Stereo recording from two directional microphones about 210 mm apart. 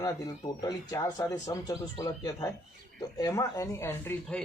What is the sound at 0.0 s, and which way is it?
Speech, 20° left (ahead or behind).